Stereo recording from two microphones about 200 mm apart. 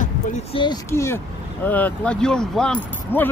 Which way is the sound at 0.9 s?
15° left (ahead or behind).